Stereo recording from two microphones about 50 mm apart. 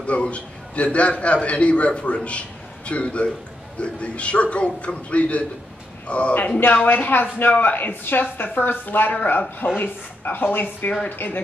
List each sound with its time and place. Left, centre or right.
0.0 s a man's voice: left